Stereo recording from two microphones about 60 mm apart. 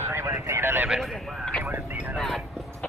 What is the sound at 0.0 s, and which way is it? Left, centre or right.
Clip-clop, right.